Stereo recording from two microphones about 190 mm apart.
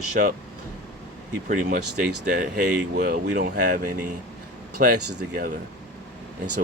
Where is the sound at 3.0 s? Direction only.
45° right (ahead or behind).